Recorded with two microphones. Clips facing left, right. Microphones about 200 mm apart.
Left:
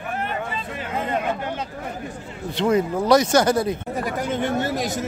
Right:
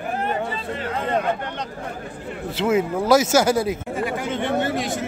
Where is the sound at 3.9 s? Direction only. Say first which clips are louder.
Even; 40° left (ahead or behind).